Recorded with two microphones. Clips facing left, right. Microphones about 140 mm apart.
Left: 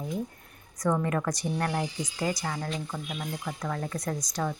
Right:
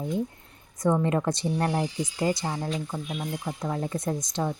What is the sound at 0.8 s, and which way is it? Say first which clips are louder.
Speech: right 3 dB; 25° right (ahead or behind).